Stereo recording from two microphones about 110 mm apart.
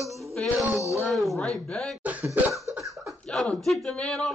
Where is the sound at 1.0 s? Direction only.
Centre (ahead or behind).